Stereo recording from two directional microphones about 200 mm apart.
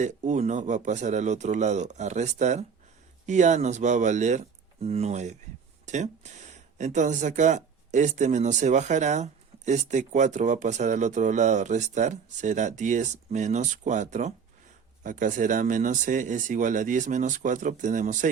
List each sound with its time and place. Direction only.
0.0 s speech: 35° right (ahead or behind)